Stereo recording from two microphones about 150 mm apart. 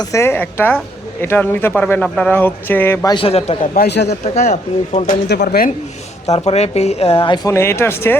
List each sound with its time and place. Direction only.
0.0 s speech: 20° left (ahead or behind)
3.1 s a man's voice: 35° left (ahead or behind)
5.0 s speech: 85° left
6.3 s speech: 45° left (ahead or behind)
7.4 s speech: 15° left (ahead or behind)